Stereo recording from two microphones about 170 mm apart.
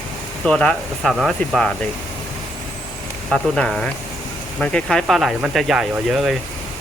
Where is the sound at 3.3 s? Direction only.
5° left (ahead or behind).